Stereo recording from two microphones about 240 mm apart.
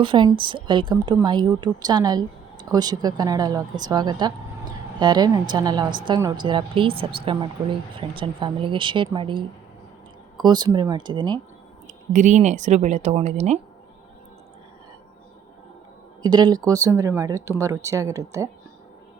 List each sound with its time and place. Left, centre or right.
0.0 s speech: centre
12.1 s speech: right
16.2 s speech: centre